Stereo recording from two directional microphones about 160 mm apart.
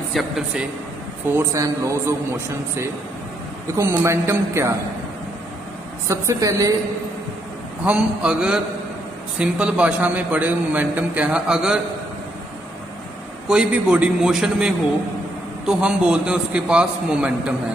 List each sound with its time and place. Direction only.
0.1 s a man's voice: centre (ahead or behind)
1.4 s speech: 20° right (ahead or behind)
3.7 s a man's voice: 15° right (ahead or behind)
6.0 s speech: 20° right (ahead or behind)
7.8 s a man's voice: 5° right (ahead or behind)
13.5 s a man's voice: 5° right (ahead or behind)